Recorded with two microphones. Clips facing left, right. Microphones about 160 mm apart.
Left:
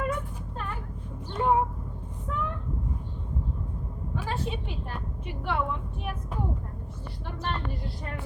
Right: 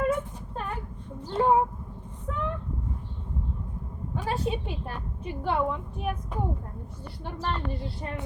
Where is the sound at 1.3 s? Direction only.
30° right (ahead or behind).